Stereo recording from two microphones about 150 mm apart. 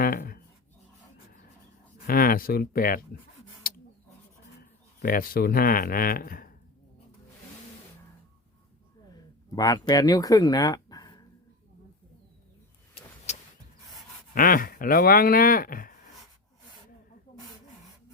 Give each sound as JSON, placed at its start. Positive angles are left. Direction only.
{"t": 0.0, "sound": "writing", "side_deg": 70}
{"t": 2.0, "sound": "speech", "side_deg": 75}
{"t": 3.6, "sound": "a sound", "side_deg": 75}
{"t": 5.0, "sound": "speech", "side_deg": 75}
{"t": 9.6, "sound": "speech", "side_deg": 25}
{"t": 13.3, "sound": "vehicle", "side_deg": 50}
{"t": 14.3, "sound": "speech", "side_deg": 70}